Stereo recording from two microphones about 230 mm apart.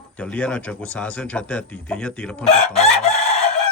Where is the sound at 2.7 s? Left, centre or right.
Left.